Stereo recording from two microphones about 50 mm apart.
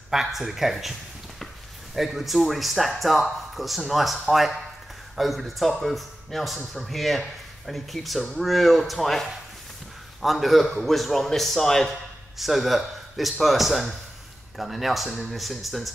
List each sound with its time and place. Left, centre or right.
0.1 s speech: centre
2.0 s speech: centre